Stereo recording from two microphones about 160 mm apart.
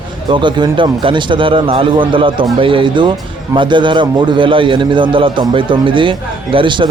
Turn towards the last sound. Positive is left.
turn(degrees=-30)  # may be behind; listen again after turning